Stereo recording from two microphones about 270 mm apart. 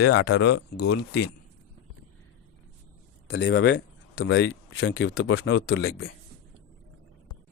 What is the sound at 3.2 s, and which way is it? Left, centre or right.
Speech, left.